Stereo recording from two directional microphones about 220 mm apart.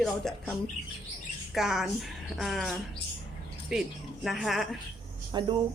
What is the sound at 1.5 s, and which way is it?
Speech, centre (ahead or behind).